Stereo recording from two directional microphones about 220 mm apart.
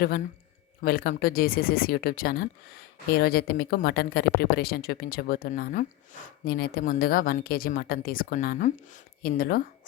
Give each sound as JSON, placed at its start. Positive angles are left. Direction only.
{"t": 0.8, "sound": "a woman's voice", "side_deg": 40}